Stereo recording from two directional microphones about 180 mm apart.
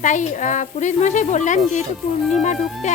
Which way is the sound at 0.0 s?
45° left (ahead or behind).